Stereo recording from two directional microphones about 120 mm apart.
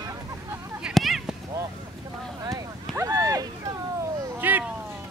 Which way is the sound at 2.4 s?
25° right (ahead or behind).